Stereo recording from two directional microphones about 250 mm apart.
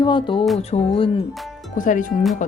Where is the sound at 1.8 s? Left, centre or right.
Left.